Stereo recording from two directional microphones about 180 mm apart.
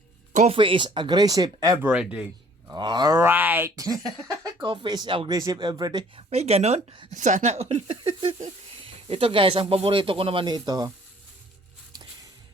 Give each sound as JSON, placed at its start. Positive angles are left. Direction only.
{"t": 0.3, "sound": "speech", "side_deg": -35}
{"t": 1.9, "sound": "a man's voice", "side_deg": -5}
{"t": 2.7, "sound": "speech", "side_deg": -25}
{"t": 6.3, "sound": "speech", "side_deg": -35}
{"t": 7.1, "sound": "speech", "side_deg": -45}